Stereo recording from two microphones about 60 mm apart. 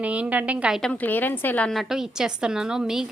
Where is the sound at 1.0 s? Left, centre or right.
Left.